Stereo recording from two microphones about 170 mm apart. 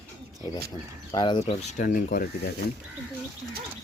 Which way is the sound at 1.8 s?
50° left (ahead or behind).